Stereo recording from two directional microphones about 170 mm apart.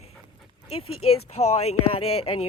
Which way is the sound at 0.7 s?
35° left (ahead or behind).